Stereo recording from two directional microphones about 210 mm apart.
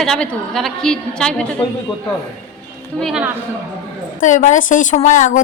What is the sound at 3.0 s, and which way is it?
Speech, centre (ahead or behind).